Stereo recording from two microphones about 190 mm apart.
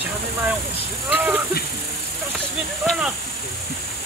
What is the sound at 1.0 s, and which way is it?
Speech, 10° right (ahead or behind).